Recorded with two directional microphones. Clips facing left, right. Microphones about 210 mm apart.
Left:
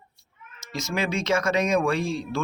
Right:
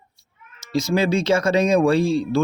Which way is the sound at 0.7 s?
35° right (ahead or behind).